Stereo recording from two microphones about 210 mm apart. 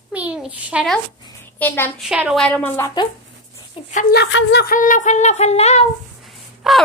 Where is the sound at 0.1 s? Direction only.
5° right (ahead or behind).